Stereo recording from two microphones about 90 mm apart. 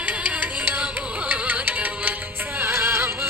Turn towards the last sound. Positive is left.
turn(degrees=-25)  # may be behind; listen again after turning